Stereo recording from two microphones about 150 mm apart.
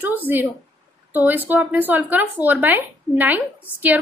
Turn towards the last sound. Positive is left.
turn(degrees=-10)  # may be behind; listen again after turning